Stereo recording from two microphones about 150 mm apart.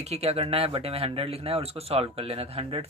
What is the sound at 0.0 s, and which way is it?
Speech, 45° right (ahead or behind).